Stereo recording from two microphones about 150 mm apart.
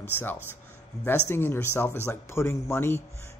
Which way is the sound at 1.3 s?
15° left (ahead or behind).